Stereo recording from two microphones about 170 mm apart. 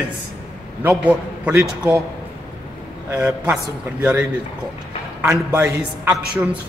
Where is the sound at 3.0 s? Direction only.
10° right (ahead or behind).